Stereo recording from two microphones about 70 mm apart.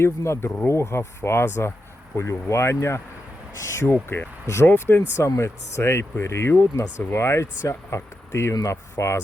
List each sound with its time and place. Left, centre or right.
0.0 s speech: left
3.8 s speech: left
4.4 s speech: left